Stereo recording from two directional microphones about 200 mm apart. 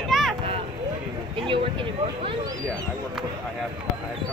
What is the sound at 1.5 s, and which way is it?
Speech, 25° right (ahead or behind).